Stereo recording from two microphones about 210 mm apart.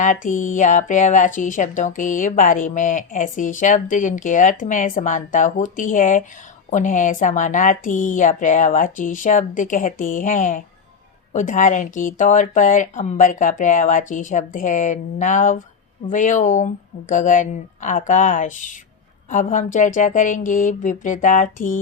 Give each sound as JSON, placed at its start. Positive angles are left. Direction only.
{"t": 0.0, "sound": "speech", "side_deg": 40}